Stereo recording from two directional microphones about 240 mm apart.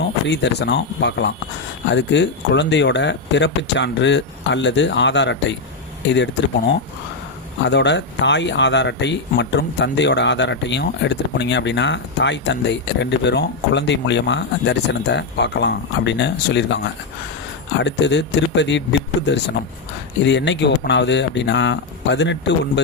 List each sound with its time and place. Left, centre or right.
0.3 s speech: left